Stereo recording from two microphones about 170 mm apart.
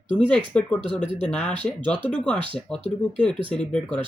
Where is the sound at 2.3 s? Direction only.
30° right (ahead or behind).